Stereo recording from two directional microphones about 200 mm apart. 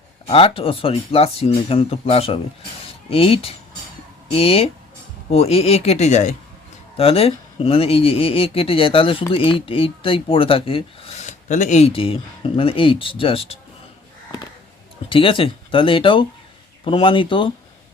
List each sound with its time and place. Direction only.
0.3 s speech: 30° left (ahead or behind)
15.1 s speech: 25° left (ahead or behind)